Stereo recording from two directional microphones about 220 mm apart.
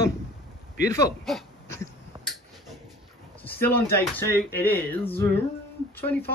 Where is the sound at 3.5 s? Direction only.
10° left (ahead or behind).